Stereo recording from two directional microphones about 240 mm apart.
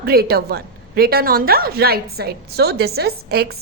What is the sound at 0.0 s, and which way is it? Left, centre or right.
A woman's voice, right.